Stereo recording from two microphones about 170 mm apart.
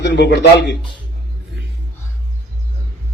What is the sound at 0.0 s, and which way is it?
Speech, 85° left.